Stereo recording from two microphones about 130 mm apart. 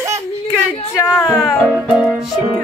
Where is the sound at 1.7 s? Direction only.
5° right (ahead or behind).